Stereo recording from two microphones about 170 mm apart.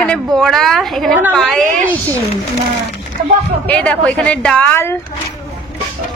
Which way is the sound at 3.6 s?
10° left (ahead or behind).